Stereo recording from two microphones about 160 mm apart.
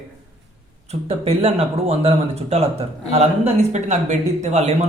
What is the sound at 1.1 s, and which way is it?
Speech, 40° right (ahead or behind).